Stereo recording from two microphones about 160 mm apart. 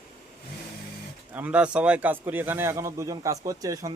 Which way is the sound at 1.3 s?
10° right (ahead or behind).